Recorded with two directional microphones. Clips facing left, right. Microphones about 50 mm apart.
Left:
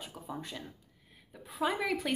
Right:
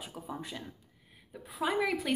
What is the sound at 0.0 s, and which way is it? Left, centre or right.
A woman's voice, centre.